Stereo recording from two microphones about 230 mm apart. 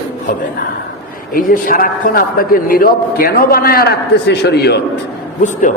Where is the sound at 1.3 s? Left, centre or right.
Left.